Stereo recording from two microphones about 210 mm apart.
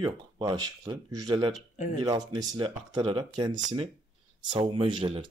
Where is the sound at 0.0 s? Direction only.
20° right (ahead or behind).